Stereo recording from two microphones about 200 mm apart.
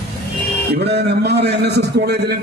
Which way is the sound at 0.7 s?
55° right (ahead or behind).